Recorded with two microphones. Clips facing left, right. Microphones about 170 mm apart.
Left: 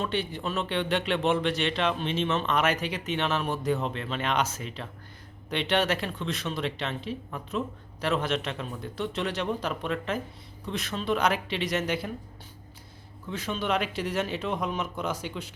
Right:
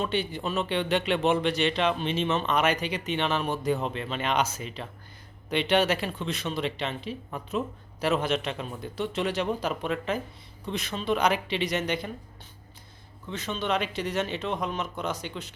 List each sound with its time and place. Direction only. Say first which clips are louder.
0.0 s speech: right 1 dB; centre (ahead or behind)
13.3 s speech: even; 10° left (ahead or behind)